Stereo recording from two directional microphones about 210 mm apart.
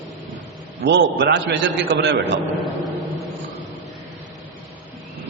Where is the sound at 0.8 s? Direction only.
55° right (ahead or behind).